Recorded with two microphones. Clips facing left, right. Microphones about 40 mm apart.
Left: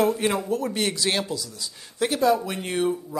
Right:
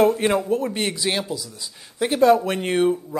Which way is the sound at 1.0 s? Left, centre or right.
Centre.